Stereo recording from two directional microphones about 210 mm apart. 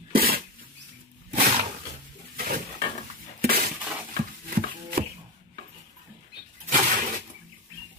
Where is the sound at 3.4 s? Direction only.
45° right (ahead or behind).